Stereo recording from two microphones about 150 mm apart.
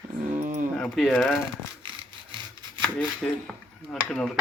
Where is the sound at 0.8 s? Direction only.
Centre (ahead or behind).